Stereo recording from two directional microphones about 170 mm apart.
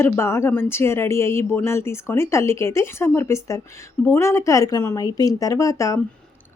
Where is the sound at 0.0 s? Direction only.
15° left (ahead or behind).